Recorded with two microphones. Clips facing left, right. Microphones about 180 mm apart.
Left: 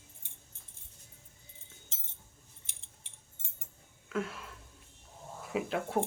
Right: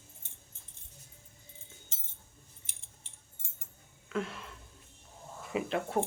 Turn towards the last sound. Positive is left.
turn(degrees=0)  # may be behind; listen again after turning